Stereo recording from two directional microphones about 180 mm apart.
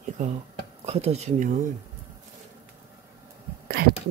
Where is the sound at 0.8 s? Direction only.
35° right (ahead or behind).